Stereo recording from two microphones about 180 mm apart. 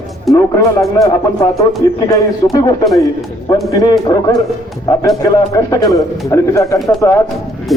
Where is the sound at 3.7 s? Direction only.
20° left (ahead or behind).